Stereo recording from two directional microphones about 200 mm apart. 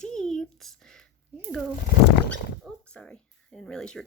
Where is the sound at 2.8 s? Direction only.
5° left (ahead or behind).